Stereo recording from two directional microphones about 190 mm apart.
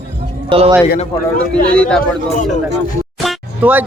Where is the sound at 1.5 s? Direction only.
5° left (ahead or behind).